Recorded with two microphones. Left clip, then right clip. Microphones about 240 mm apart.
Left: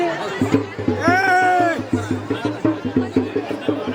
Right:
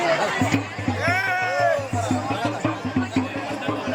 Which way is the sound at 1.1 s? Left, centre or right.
Left.